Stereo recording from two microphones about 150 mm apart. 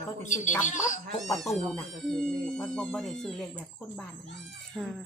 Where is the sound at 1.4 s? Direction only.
Centre (ahead or behind).